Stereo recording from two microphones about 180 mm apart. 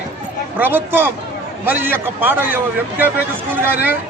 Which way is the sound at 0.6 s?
10° right (ahead or behind).